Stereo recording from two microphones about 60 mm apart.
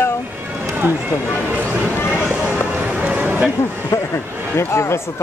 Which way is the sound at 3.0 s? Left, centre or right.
Right.